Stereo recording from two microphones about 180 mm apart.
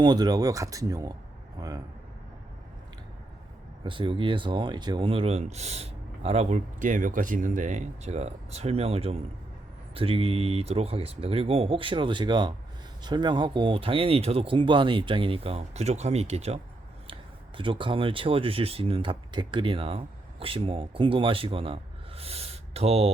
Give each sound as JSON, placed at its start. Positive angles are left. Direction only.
{"t": 0.0, "sound": "speech", "side_deg": -25}
{"t": 3.8, "sound": "speech", "side_deg": -30}
{"t": 17.6, "sound": "speech", "side_deg": -30}